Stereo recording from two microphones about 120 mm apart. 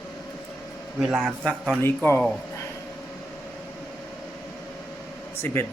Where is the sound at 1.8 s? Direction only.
20° left (ahead or behind).